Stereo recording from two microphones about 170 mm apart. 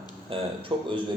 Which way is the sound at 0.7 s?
30° right (ahead or behind).